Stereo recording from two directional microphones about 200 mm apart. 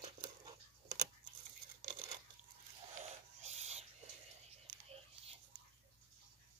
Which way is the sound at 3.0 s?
35° right (ahead or behind).